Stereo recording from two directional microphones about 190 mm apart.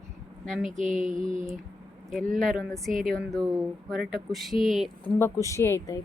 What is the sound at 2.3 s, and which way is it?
Speech, centre (ahead or behind).